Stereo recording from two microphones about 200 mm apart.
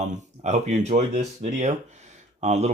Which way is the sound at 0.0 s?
35° right (ahead or behind).